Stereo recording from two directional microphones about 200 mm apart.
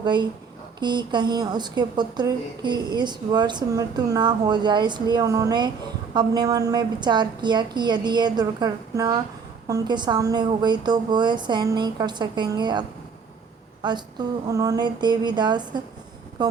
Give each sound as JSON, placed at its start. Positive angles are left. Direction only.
{"t": 0.0, "sound": "a woman's voice", "side_deg": -20}
{"t": 13.8, "sound": "a woman's voice", "side_deg": -20}